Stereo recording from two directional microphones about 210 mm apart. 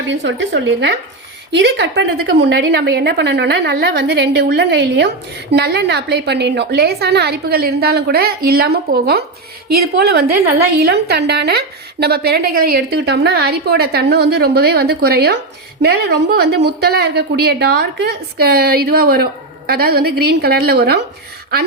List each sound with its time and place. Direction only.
0.1 s a woman's voice: 60° right (ahead or behind)